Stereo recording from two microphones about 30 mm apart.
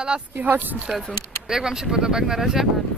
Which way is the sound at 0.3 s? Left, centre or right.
Right.